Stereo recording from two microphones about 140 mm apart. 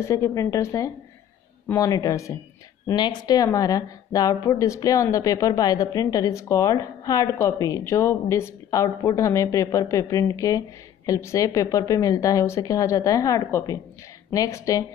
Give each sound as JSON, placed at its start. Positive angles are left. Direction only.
{"t": 0.0, "sound": "a woman's voice", "side_deg": 20}